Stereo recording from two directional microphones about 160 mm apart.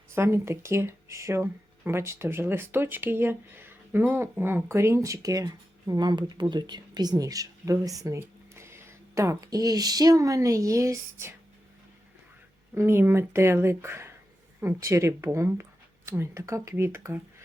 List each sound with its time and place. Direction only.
0.1 s speech: 15° right (ahead or behind)
12.7 s speech: 15° right (ahead or behind)